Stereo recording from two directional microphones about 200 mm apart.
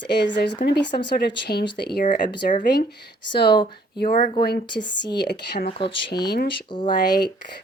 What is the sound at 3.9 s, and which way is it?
Speech, 45° left (ahead or behind).